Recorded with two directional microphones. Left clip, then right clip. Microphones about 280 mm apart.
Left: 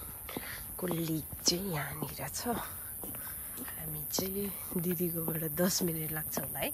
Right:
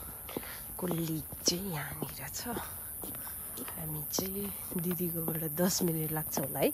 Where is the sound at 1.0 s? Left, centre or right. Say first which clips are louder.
Left 2 dB; centre.